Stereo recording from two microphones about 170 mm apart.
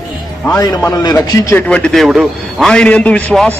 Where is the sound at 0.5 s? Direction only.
20° left (ahead or behind).